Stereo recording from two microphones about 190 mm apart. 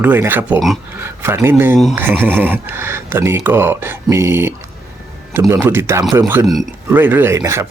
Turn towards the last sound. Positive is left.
turn(degrees=-15)  # may be behind; listen again after turning